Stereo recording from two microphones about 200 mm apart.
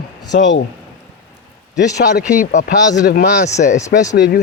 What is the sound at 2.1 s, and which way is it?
Speech, 40° left (ahead or behind).